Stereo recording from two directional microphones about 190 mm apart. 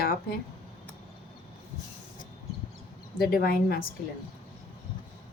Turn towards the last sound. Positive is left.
turn(degrees=50)  # may be behind; listen again after turning